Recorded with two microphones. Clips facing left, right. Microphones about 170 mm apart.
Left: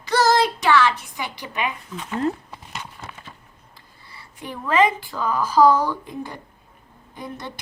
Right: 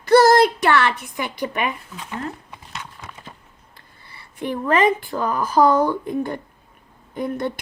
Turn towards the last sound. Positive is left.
turn(degrees=-55)  # may be behind; listen again after turning